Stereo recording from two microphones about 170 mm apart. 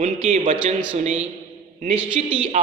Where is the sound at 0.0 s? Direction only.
45° right (ahead or behind).